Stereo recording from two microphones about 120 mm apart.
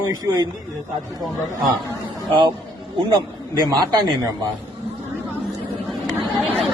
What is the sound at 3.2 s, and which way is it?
A man's voice, 35° right (ahead or behind).